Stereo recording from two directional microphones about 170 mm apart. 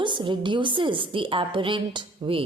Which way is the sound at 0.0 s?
25° right (ahead or behind).